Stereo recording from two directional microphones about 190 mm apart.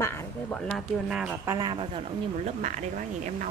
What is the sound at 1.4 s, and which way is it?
Speech, 20° right (ahead or behind).